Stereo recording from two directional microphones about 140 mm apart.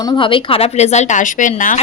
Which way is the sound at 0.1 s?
35° left (ahead or behind).